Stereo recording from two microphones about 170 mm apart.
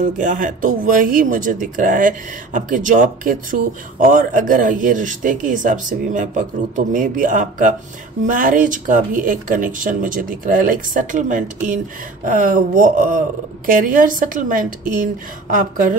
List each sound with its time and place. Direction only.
0.0 s speech: 50° right (ahead or behind)